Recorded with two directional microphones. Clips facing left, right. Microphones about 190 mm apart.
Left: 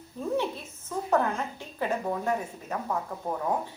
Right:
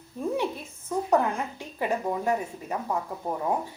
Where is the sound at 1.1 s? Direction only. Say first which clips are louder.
Right 1 dB; 15° right (ahead or behind).